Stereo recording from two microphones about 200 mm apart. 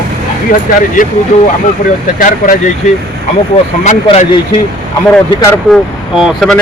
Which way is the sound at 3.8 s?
35° left (ahead or behind).